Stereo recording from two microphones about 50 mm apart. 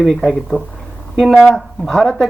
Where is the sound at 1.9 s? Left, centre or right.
Centre.